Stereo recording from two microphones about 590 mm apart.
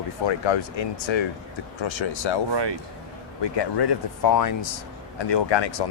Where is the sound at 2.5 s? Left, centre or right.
Right.